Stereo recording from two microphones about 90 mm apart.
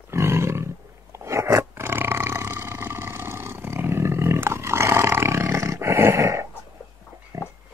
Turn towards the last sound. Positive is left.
turn(degrees=-30)  # may be behind; listen again after turning